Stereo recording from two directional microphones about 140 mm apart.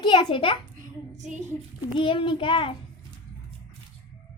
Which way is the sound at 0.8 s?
60° right (ahead or behind).